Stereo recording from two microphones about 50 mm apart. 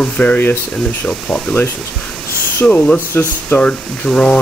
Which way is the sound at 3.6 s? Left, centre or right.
Centre.